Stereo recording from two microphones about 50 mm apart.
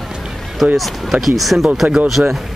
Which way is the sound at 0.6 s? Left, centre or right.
Centre.